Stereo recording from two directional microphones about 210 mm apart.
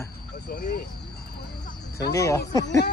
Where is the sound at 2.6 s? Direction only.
55° left (ahead or behind).